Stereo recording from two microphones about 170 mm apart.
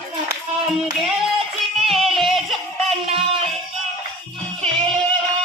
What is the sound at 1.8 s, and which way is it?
Music, centre (ahead or behind).